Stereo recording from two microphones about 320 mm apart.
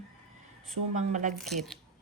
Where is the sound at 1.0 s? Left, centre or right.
Right.